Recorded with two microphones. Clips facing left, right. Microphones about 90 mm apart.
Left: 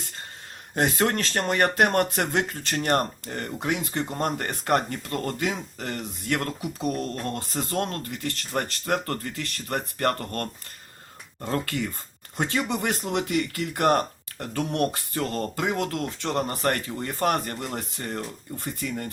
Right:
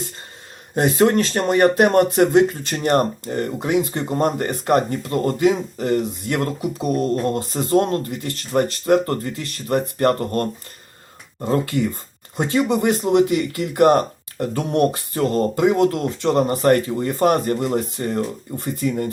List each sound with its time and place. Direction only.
0.8 s speech: 15° right (ahead or behind)
11.5 s speech: 20° right (ahead or behind)